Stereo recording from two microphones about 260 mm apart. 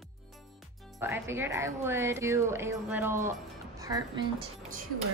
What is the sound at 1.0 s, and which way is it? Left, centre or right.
A woman's voice, centre.